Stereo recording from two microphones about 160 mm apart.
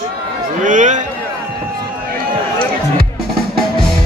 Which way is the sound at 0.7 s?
50° right (ahead or behind).